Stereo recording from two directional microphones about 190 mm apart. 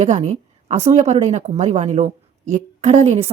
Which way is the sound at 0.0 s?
35° right (ahead or behind).